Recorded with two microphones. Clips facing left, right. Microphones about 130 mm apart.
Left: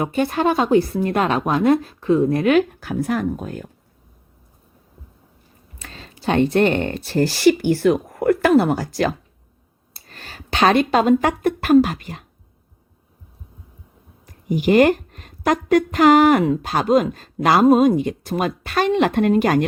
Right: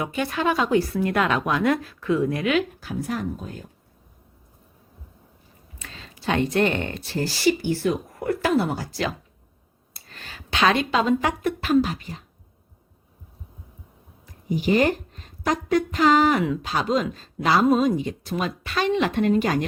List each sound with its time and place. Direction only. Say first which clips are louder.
0.0 s speech: left 5 dB; 40° left (ahead or behind); by 3.7 s 65° left (ahead or behind)
5.8 s a sound: left 3 dB; 45° left (ahead or behind)
6.5 s speech: left 5 dB; 40° left (ahead or behind); by 8.9 s 65° left (ahead or behind)
8.9 s speech: left 7 dB; 45° left (ahead or behind); by 12.2 s 60° left (ahead or behind)
14.5 s a woman's voice: left 6 dB; 65° left (ahead or behind)